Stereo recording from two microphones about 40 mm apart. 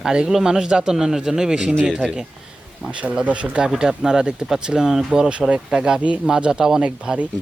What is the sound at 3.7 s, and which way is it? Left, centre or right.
Speech, centre.